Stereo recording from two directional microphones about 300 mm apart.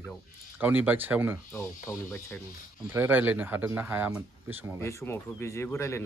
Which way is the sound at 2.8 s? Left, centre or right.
Centre.